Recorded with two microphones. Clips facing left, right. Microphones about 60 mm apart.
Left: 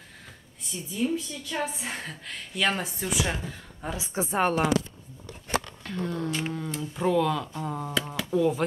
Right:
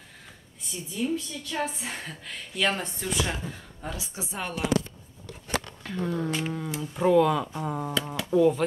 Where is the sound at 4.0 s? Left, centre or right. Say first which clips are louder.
Left 14 dB; left.